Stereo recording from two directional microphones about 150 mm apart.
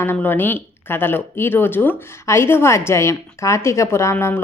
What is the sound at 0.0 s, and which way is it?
Speech, 15° left (ahead or behind).